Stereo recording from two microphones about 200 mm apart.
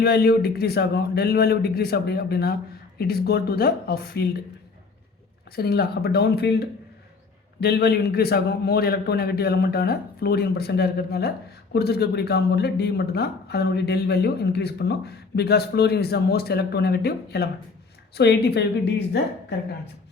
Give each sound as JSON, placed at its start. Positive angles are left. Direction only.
{"t": 0.0, "sound": "speech", "side_deg": 50}
{"t": 5.5, "sound": "a woman's voice", "side_deg": 50}